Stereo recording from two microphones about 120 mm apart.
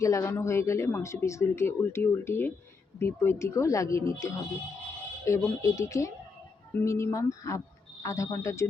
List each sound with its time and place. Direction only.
0.0 s speech: 25° left (ahead or behind)